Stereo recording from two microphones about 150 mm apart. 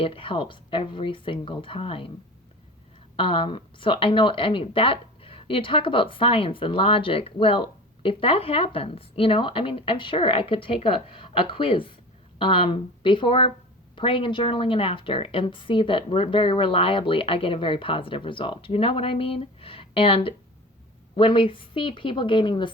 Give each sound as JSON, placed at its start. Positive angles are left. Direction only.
{"t": 0.0, "sound": "a woman's voice", "side_deg": 35}
{"t": 3.2, "sound": "a woman's voice", "side_deg": 35}